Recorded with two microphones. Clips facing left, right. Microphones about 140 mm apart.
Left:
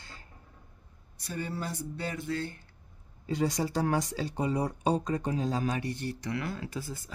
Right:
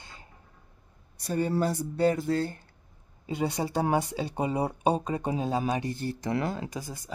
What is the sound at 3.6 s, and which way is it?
A woman's voice, 20° right (ahead or behind).